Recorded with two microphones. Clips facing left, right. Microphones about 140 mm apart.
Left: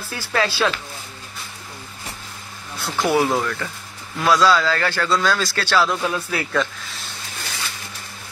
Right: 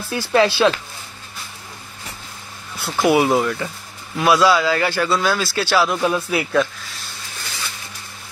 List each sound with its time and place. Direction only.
0.1 s speech: 20° right (ahead or behind)
2.8 s a man's voice: 15° right (ahead or behind)